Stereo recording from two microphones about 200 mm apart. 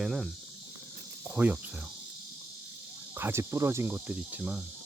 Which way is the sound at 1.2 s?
10° right (ahead or behind).